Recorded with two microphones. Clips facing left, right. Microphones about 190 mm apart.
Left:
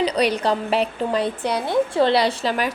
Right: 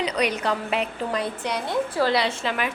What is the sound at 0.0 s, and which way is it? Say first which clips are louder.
A woman's voice: left 5 dB; 35° left (ahead or behind).